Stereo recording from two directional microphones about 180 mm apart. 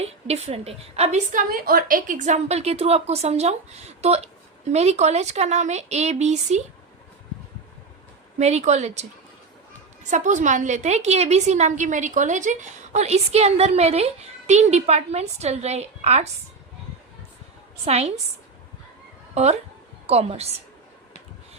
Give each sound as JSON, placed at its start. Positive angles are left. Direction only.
{"t": 0.0, "sound": "a woman's voice", "side_deg": -35}
{"t": 8.4, "sound": "a woman's voice", "side_deg": -40}
{"t": 10.1, "sound": "a woman's voice", "side_deg": -40}
{"t": 17.8, "sound": "a woman's voice", "side_deg": -35}
{"t": 19.3, "sound": "a woman's voice", "side_deg": -35}